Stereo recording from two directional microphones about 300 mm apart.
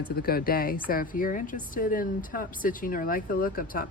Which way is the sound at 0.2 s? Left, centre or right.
Left.